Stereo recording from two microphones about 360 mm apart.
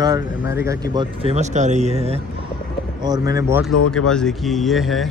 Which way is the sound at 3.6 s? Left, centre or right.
Left.